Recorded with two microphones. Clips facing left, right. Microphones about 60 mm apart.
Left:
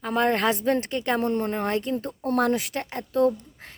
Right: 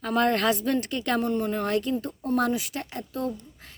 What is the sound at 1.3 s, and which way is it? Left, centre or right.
Speech, left.